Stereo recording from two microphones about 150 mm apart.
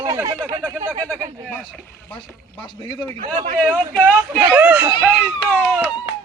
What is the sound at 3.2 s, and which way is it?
Speech, 65° right (ahead or behind).